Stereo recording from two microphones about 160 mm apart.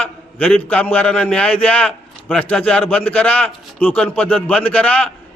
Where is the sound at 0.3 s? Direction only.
10° left (ahead or behind).